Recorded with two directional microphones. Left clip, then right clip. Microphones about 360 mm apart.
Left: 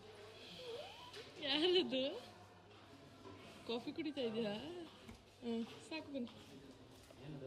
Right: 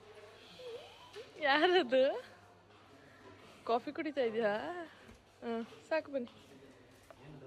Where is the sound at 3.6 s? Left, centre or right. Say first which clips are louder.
Right 9 dB; centre.